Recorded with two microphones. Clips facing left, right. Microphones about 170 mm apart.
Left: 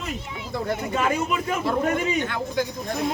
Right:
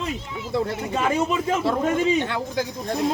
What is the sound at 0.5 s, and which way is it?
Speech, 30° right (ahead or behind).